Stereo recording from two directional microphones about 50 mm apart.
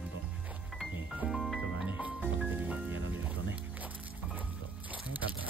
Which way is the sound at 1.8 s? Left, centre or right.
Right.